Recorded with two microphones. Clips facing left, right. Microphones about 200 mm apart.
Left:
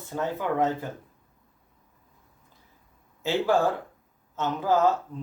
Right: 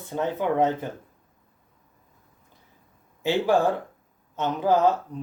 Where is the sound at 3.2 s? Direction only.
15° right (ahead or behind).